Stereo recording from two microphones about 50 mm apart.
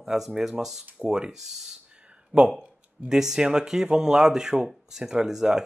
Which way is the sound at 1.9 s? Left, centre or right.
Centre.